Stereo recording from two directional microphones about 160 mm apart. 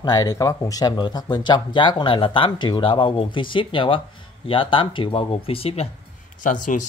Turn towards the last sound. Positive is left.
turn(degrees=55)  # may be behind; listen again after turning